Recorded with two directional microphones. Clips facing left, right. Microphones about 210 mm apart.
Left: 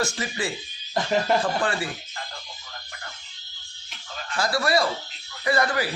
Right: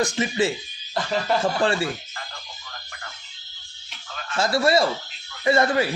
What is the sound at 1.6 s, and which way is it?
Speech, 25° right (ahead or behind).